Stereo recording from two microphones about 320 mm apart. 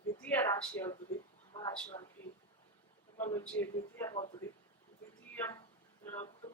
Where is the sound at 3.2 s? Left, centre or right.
Centre.